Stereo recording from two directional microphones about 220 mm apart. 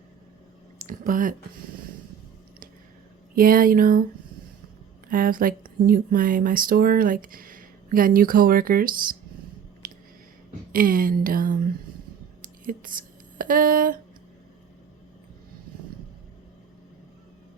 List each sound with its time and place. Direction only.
0.9 s speech: 35° right (ahead or behind)
3.3 s speech: 40° right (ahead or behind)
5.0 s speech: 40° right (ahead or behind)
9.8 s a sound: 40° right (ahead or behind)
10.7 s speech: 40° right (ahead or behind)
12.6 s speech: 40° right (ahead or behind)